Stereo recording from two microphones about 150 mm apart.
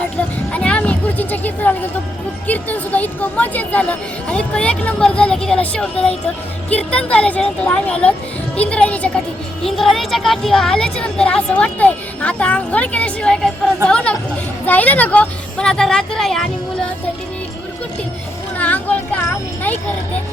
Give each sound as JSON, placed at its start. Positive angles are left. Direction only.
{"t": 0.5, "sound": "a sound", "side_deg": 10}
{"t": 2.5, "sound": "a woman's voice", "side_deg": 10}
{"t": 18.5, "sound": "speech", "side_deg": 10}